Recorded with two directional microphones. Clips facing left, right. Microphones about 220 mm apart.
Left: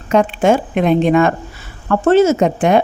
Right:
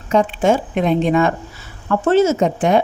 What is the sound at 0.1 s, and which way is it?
Speech, 65° left (ahead or behind).